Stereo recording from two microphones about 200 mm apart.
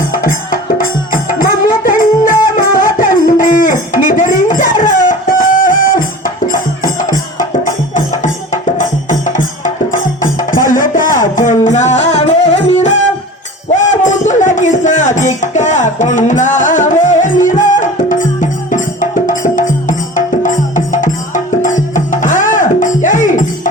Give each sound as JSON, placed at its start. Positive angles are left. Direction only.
{"t": 1.4, "sound": "music", "side_deg": 45}